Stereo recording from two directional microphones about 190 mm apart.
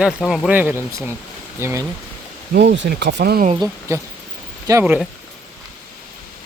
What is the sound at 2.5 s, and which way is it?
Speech, 60° right (ahead or behind).